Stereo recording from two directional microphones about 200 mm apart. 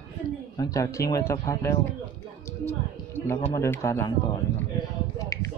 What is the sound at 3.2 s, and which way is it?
Speech, 15° left (ahead or behind).